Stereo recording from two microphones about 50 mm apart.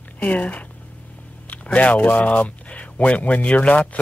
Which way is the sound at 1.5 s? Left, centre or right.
Left.